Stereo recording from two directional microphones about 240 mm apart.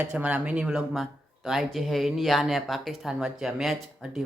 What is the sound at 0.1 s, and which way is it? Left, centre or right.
Speech, centre.